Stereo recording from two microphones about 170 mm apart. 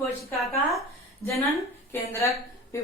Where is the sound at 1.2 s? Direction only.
15° left (ahead or behind).